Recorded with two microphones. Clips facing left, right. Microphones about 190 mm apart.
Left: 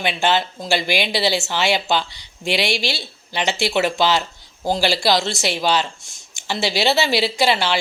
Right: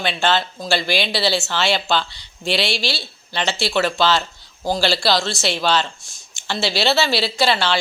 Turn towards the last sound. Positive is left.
turn(degrees=15)  # may be behind; listen again after turning